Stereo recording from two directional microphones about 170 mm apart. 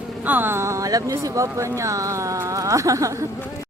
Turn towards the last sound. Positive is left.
turn(degrees=-20)  # may be behind; listen again after turning